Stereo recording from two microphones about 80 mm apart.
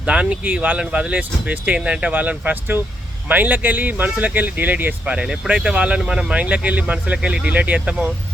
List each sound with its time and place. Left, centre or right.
0.0 s speech: centre